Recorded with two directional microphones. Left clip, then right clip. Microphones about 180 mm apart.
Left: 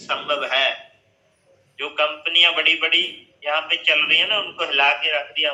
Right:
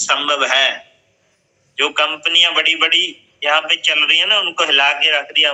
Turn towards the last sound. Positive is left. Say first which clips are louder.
# right 7 dB
turn(degrees=-50)  # may be behind; listen again after turning